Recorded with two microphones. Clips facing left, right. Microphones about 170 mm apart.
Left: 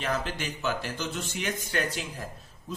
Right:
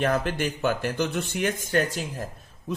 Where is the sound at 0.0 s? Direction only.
55° right (ahead or behind).